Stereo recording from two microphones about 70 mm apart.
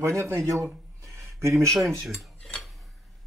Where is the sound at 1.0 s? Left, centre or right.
Right.